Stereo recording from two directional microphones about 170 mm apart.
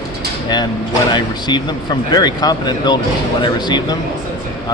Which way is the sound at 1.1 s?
25° left (ahead or behind).